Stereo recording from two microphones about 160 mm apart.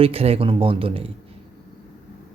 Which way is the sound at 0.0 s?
40° right (ahead or behind).